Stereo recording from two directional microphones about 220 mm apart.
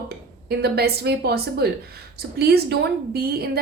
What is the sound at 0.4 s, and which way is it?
A woman's voice, 45° right (ahead or behind).